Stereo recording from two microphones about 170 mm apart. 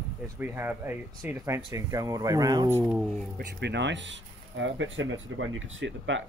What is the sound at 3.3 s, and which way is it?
Speech, 90° right.